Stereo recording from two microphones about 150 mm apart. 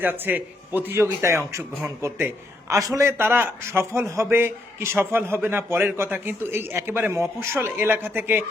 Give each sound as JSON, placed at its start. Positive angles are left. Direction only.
{"t": 0.0, "sound": "a man's voice", "side_deg": -10}